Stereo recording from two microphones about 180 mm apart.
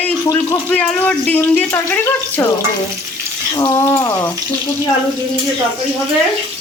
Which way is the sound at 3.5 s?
25° left (ahead or behind).